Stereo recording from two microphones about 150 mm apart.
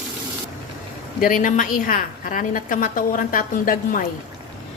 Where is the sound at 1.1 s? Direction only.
65° left (ahead or behind).